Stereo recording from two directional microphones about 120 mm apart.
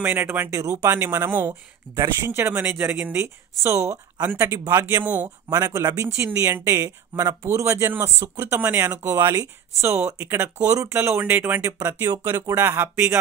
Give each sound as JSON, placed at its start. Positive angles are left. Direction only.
{"t": 0.0, "sound": "speech", "side_deg": -15}
{"t": 2.6, "sound": "speech", "side_deg": -5}
{"t": 5.5, "sound": "speech", "side_deg": -30}
{"t": 8.5, "sound": "speech", "side_deg": -15}
{"t": 8.9, "sound": "speech", "side_deg": -30}
{"t": 12.3, "sound": "speech", "side_deg": -35}
{"t": 12.5, "sound": "speech", "side_deg": -20}